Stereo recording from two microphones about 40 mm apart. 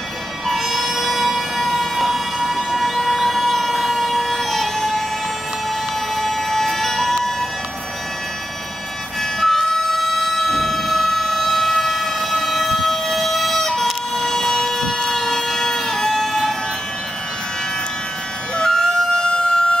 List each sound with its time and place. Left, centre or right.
0.5 s music: centre
6.1 s emergency vehicle: centre
9.4 s music: centre
10.1 s siren: centre
18.6 s music: centre
19.2 s siren: left